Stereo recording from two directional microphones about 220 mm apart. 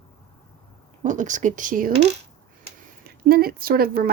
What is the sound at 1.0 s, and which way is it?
Speech, 35° right (ahead or behind).